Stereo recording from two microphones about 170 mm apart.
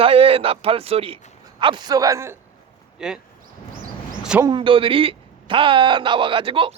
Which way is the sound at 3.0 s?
5° right (ahead or behind).